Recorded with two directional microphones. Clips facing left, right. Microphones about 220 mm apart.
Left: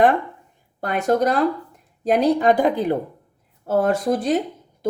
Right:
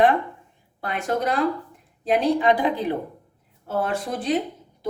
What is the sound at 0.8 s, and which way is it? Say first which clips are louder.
Speech: left 6 dB; 45° left (ahead or behind).